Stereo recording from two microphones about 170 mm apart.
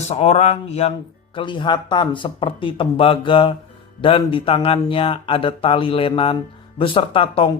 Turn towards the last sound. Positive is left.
turn(degrees=35)  # may be behind; listen again after turning